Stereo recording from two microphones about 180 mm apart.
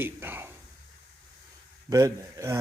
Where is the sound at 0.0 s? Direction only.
10° right (ahead or behind).